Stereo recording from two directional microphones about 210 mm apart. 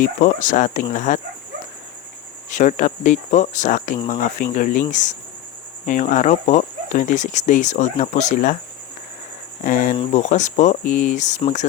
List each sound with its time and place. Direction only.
0.0 s speech: 35° left (ahead or behind)
2.5 s speech: 35° left (ahead or behind)
9.6 s speech: 40° left (ahead or behind)